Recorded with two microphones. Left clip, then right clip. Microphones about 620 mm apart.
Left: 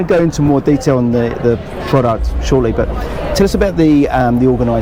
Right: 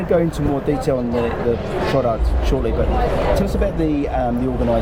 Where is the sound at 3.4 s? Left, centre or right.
Left.